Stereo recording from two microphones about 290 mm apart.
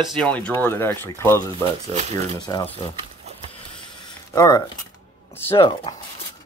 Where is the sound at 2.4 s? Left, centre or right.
Centre.